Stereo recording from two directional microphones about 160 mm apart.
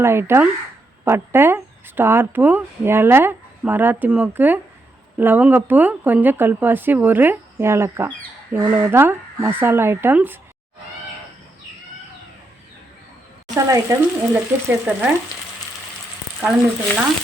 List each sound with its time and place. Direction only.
0.0 s speech: 15° right (ahead or behind)
13.6 s speech: 20° right (ahead or behind)